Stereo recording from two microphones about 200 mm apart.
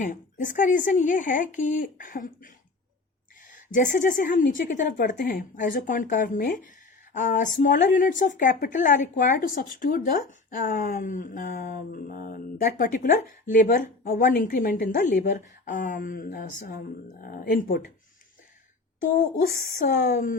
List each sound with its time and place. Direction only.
0.0 s speech: 40° left (ahead or behind)
3.5 s a woman's voice: 40° left (ahead or behind)
19.5 s a woman's voice: 45° left (ahead or behind)